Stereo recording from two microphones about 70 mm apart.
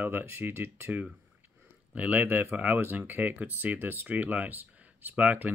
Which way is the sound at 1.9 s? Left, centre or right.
Right.